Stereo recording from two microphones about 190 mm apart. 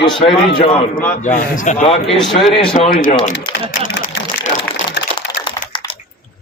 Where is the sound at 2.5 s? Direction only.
30° left (ahead or behind).